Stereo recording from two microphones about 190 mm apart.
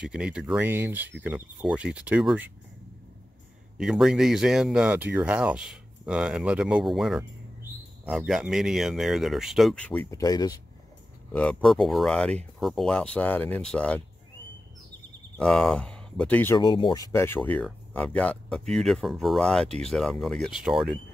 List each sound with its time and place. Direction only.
0.0 s speech: 5° right (ahead or behind)
3.7 s speech: centre (ahead or behind)
10.1 s speech: 20° left (ahead or behind)
11.3 s speech: 5° left (ahead or behind)
15.3 s speech: 5° left (ahead or behind)
16.5 s speech: 25° left (ahead or behind)
17.1 s speech: 10° left (ahead or behind)